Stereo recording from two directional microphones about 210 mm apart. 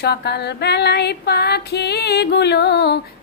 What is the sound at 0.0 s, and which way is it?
Female singing, 50° left (ahead or behind).